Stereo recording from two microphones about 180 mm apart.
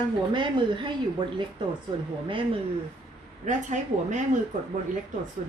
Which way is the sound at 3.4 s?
45° right (ahead or behind).